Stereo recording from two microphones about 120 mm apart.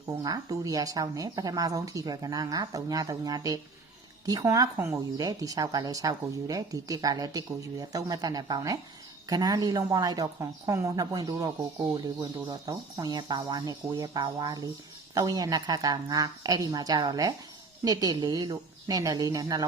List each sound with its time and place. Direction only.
0.2 s speech: 30° right (ahead or behind)